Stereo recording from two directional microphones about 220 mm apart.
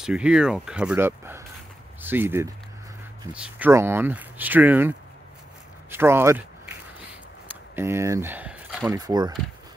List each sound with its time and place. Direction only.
0.0 s speech: 5° right (ahead or behind)
5.9 s a sound: 10° right (ahead or behind)
8.9 s speech: 20° right (ahead or behind)